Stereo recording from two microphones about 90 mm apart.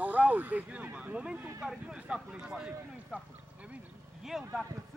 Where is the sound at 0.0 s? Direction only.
15° right (ahead or behind).